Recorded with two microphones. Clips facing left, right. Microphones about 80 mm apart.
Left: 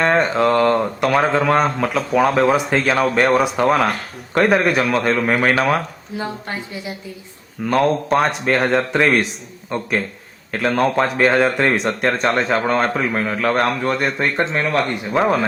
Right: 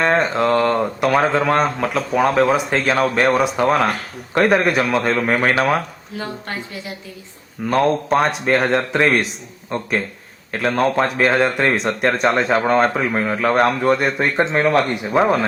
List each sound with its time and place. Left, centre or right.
0.0 s speech: centre
6.1 s speech: centre
7.6 s speech: centre
14.5 s speech: right
14.8 s speech: centre